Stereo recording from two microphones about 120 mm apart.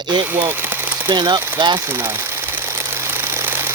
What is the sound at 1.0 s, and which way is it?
Speech, 40° right (ahead or behind).